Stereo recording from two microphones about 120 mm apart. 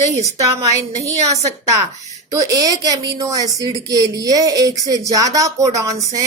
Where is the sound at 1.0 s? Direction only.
25° right (ahead or behind).